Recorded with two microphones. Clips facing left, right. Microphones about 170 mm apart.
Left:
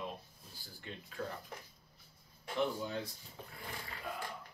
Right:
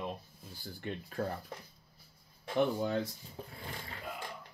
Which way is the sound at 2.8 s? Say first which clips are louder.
Right 7 dB; 55° right (ahead or behind).